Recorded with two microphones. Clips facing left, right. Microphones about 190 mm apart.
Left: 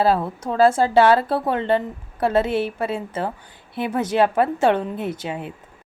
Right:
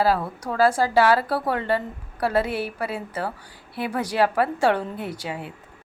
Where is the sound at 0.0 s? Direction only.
25° left (ahead or behind).